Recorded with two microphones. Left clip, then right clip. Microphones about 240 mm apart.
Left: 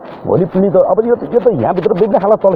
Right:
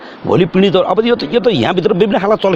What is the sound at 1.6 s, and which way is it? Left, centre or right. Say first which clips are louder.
Speech: even; right.